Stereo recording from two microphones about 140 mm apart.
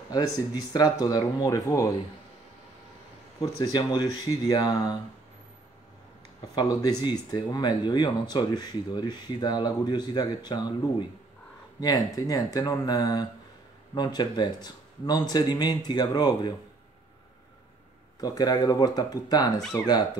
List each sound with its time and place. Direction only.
0.6 s speech: 30° left (ahead or behind)
3.3 s speech: 35° left (ahead or behind)
6.5 s speech: 30° left (ahead or behind)
18.2 s speech: 30° left (ahead or behind)